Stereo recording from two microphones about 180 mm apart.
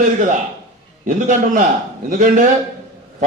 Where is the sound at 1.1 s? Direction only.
45° right (ahead or behind).